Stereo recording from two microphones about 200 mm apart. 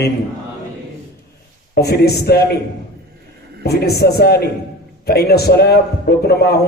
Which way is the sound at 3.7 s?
55° left (ahead or behind).